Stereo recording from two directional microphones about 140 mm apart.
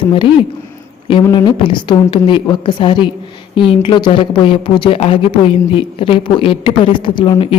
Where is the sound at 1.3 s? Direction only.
35° left (ahead or behind).